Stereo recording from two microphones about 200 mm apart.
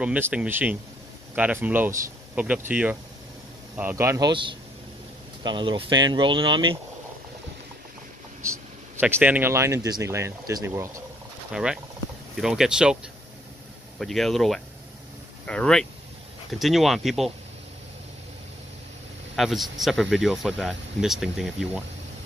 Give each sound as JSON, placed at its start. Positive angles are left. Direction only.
{"t": 0.0, "sound": "speech", "side_deg": -5}
{"t": 8.4, "sound": "speech", "side_deg": -15}
{"t": 13.9, "sound": "speech", "side_deg": 0}
{"t": 19.3, "sound": "speech", "side_deg": 0}